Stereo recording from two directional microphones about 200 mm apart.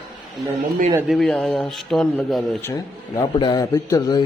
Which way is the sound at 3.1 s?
20° left (ahead or behind).